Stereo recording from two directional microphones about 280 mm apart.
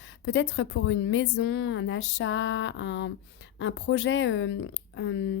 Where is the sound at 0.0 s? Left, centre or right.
Left.